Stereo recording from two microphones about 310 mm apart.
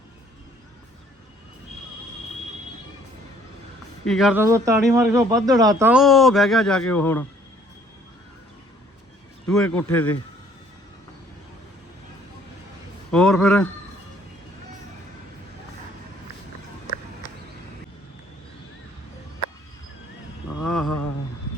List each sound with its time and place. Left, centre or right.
4.0 s a man's voice: centre
9.5 s a man's voice: centre
13.1 s a man's voice: centre
20.6 s a sound: centre